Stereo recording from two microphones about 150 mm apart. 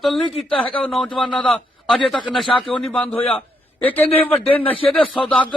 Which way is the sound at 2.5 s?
35° left (ahead or behind).